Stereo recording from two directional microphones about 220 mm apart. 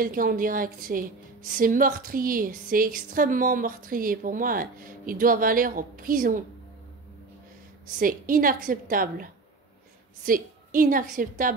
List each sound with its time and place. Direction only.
0.0 s a woman's voice: 40° right (ahead or behind)
7.8 s a woman's voice: 40° right (ahead or behind)